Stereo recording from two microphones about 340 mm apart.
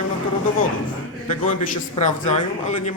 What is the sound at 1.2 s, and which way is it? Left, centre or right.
Speech, left.